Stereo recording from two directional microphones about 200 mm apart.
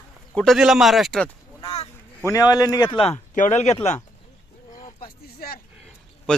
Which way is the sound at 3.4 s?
35° left (ahead or behind).